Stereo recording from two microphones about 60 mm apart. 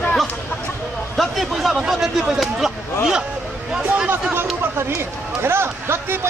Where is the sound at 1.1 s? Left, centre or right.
Centre.